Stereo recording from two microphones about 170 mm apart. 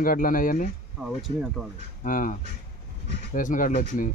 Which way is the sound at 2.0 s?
50° left (ahead or behind).